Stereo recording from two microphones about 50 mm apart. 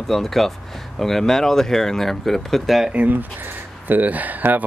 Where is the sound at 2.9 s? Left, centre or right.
Right.